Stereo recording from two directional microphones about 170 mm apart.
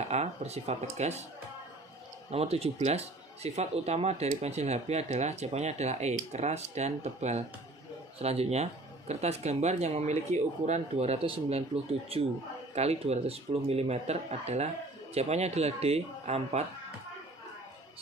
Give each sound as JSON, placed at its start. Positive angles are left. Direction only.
{"t": 0.1, "sound": "speech", "side_deg": -40}
{"t": 2.3, "sound": "speech", "side_deg": -35}